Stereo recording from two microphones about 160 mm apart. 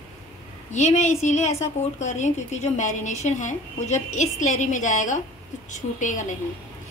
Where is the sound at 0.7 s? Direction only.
45° left (ahead or behind).